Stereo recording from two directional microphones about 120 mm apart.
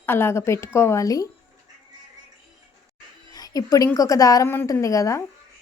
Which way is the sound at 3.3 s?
30° left (ahead or behind).